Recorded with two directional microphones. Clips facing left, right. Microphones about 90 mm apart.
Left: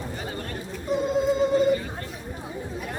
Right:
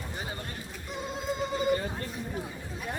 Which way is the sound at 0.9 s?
Centre (ahead or behind).